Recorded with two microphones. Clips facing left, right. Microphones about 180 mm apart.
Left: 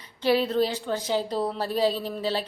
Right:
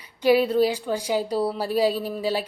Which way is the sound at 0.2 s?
10° right (ahead or behind).